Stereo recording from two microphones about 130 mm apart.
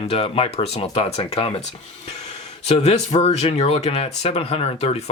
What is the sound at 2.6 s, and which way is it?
Speech, 55° left (ahead or behind).